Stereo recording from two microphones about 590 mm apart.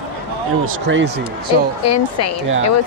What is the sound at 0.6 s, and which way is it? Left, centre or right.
Speech, centre.